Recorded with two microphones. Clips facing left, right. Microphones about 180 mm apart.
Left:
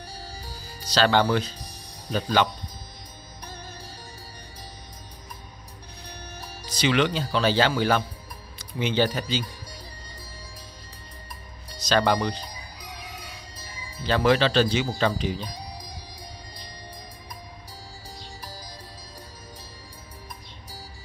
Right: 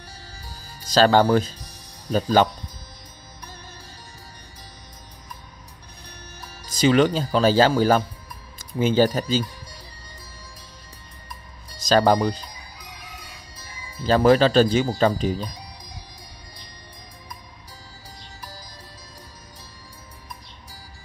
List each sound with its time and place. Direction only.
0.9 s speech: 45° right (ahead or behind)
6.8 s speech: 40° right (ahead or behind)
11.9 s speech: 40° right (ahead or behind)
14.0 s speech: 40° right (ahead or behind)